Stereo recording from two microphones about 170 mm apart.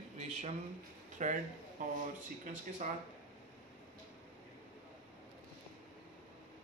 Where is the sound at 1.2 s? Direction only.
45° right (ahead or behind).